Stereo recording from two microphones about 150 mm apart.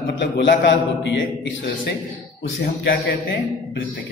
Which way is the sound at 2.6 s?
90° left.